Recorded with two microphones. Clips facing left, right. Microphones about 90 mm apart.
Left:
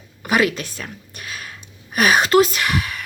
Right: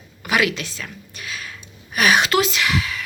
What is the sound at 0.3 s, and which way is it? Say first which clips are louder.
Speech: left 2 dB; 40° left (ahead or behind).